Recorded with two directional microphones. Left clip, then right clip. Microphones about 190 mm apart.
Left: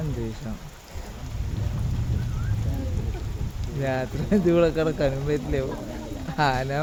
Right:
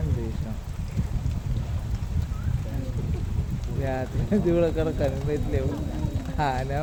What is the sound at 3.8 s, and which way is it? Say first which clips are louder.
Speech: left 3 dB; 20° left (ahead or behind).